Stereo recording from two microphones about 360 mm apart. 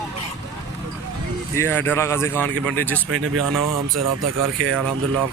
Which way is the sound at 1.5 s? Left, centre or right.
Centre.